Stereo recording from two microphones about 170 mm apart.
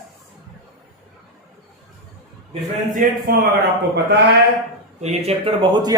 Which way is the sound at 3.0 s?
50° right (ahead or behind).